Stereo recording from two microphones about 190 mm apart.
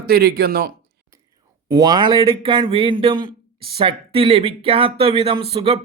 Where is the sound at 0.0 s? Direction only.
55° right (ahead or behind).